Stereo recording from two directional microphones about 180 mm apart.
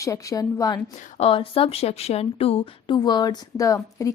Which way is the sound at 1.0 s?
40° left (ahead or behind).